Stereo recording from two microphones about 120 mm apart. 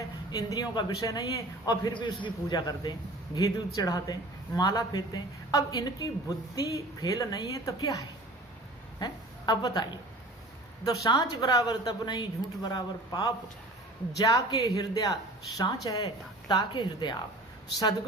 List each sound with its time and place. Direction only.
0.3 s a woman's voice: 35° left (ahead or behind)
11.0 s a woman's voice: 35° left (ahead or behind)